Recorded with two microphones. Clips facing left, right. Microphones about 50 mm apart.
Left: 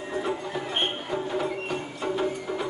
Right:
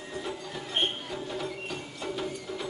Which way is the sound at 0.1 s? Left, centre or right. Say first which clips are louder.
Left 7 dB; left.